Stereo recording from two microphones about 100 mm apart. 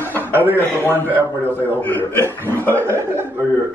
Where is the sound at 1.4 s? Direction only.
20° left (ahead or behind).